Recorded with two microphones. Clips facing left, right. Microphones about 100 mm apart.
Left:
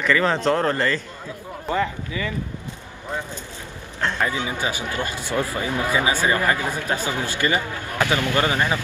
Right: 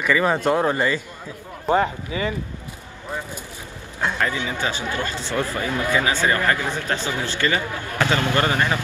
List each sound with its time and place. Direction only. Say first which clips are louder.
0.0 s speech: even; 10° right (ahead or behind)
1.7 s speech: right 4 dB; 25° right (ahead or behind)
4.2 s speech: even; 15° left (ahead or behind)